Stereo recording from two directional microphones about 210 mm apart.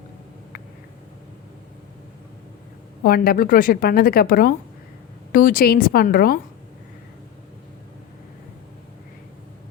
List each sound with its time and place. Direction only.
3.0 s a woman's voice: 45° left (ahead or behind)